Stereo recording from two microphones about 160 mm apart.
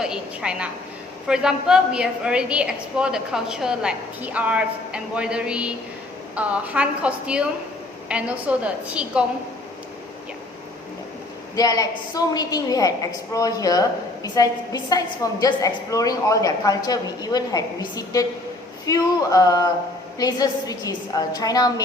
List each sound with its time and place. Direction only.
0.0 s a woman's voice: 5° right (ahead or behind)
11.5 s a woman's voice: 25° left (ahead or behind)